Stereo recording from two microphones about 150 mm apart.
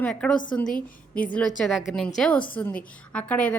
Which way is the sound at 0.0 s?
5° left (ahead or behind).